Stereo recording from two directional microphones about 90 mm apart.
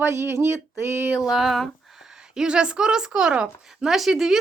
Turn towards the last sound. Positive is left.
turn(degrees=-5)  # may be behind; listen again after turning